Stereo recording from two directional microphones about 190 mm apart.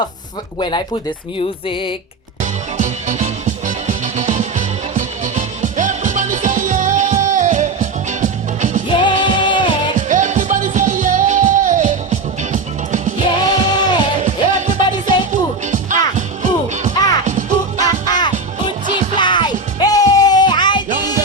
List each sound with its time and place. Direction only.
2.4 s music: 40° right (ahead or behind)
8.9 s music: 25° left (ahead or behind)
10.1 s music: 40° right (ahead or behind)
13.4 s music: 25° left (ahead or behind)
14.2 s music: 40° right (ahead or behind)
17.7 s music: 20° left (ahead or behind)
18.6 s music: 40° right (ahead or behind)
19.1 s music: 25° left (ahead or behind)